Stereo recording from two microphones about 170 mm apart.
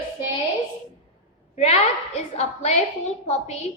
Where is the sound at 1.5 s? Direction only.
40° left (ahead or behind).